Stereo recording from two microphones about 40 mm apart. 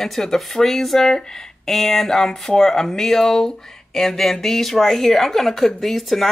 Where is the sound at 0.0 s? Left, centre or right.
Centre.